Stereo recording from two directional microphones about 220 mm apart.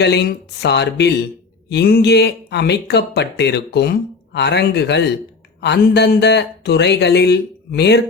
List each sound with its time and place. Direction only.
0.0 s speech: 50° left (ahead or behind)